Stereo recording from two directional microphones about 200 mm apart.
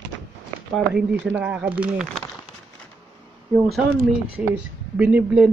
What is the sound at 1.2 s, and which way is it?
Speech, 5° right (ahead or behind).